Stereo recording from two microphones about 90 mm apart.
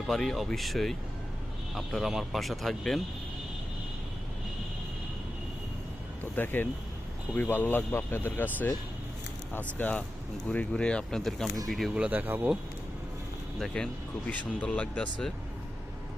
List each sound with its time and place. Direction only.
0.1 s speech: 5° left (ahead or behind)
6.3 s speech: 20° left (ahead or behind); by 11.9 s centre (ahead or behind)
11.9 s speech: 15° right (ahead or behind)
13.6 s speech: 5° left (ahead or behind)